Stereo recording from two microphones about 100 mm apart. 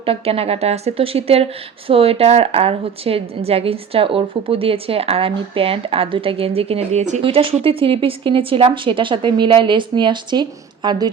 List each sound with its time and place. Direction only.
0.0 s a woman's voice: 75° right (ahead or behind); by 11.1 s 45° right (ahead or behind)